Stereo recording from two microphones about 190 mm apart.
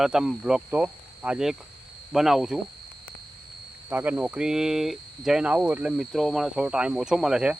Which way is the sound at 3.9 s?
10° right (ahead or behind).